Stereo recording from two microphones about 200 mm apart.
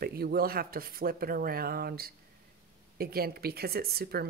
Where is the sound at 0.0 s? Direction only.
50° right (ahead or behind).